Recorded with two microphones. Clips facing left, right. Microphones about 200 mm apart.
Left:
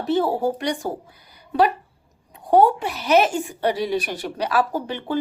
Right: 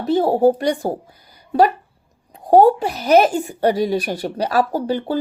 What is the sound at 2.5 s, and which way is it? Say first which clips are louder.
A woman's voice: right 4 dB; 40° right (ahead or behind).